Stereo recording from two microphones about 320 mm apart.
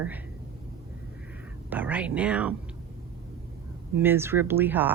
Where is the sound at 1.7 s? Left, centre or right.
Centre.